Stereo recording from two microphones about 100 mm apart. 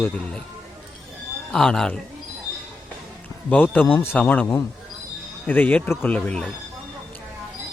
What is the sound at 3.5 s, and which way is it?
Speech, 15° left (ahead or behind).